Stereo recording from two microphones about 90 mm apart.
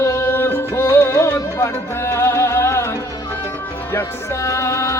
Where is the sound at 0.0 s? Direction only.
35° left (ahead or behind).